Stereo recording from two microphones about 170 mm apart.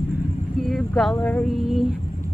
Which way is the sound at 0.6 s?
Centre (ahead or behind).